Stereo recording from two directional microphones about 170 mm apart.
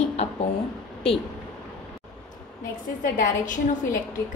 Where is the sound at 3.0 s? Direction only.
50° left (ahead or behind).